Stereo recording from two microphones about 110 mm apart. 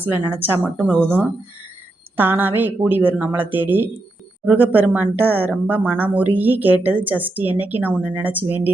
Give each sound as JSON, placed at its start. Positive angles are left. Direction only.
{"t": 0.0, "sound": "speech", "side_deg": -20}